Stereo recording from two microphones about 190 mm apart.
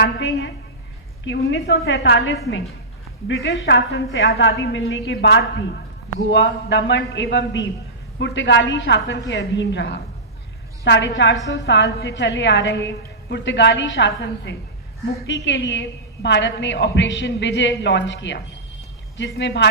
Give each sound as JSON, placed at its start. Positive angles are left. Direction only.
{"t": 0.0, "sound": "a woman's voice", "side_deg": 65}